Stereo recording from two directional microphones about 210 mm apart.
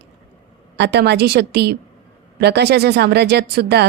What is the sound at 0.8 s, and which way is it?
A woman's voice, 55° right (ahead or behind).